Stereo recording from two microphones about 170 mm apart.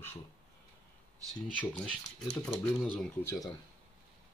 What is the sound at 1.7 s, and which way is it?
Speech, 5° left (ahead or behind).